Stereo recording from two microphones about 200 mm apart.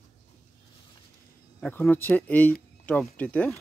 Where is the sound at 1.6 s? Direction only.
10° left (ahead or behind).